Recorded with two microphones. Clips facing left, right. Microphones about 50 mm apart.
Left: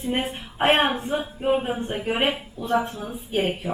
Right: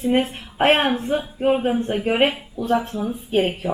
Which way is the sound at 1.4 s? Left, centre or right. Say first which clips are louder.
Right 4 dB; centre.